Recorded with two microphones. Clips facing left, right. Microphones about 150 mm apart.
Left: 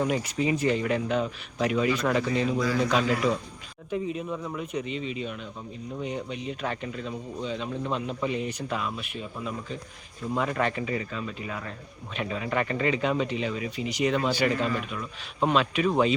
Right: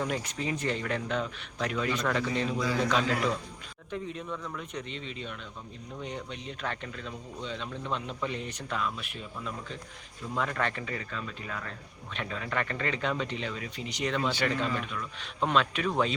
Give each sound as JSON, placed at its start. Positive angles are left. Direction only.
{"t": 0.0, "sound": "speech", "side_deg": 10}